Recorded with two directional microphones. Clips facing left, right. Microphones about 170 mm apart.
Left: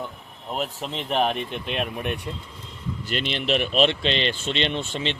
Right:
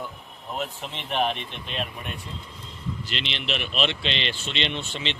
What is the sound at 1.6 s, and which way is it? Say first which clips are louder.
Speech: left 4 dB; 60° left (ahead or behind).